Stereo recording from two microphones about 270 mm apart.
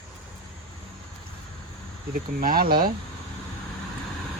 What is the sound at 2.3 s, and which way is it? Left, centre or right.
Speech, right.